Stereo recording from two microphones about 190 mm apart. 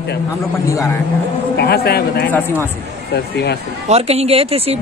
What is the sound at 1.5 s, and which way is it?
Speech, 55° left (ahead or behind).